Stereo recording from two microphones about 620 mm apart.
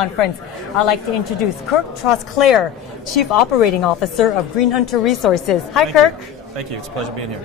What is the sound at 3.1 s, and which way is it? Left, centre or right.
Speech, left.